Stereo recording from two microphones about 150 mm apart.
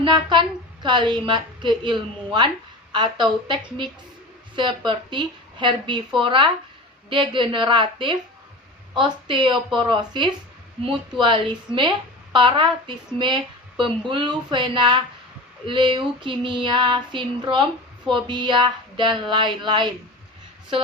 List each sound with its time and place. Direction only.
0.0 s a woman's voice: 30° right (ahead or behind)